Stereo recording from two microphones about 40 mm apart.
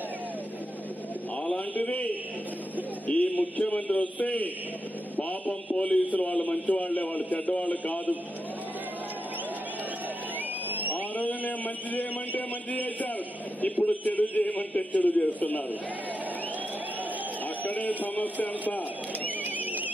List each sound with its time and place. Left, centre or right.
1.4 s a sound: left
3.7 s a man's voice: left
5.8 s a man's voice: left
10.9 s a man's voice: left
17.6 s speech: left